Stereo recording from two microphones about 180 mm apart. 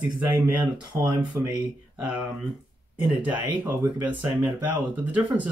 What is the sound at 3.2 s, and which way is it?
Speech, 10° right (ahead or behind).